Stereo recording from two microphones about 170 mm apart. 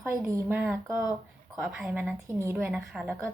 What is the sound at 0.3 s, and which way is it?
Speech, 15° right (ahead or behind).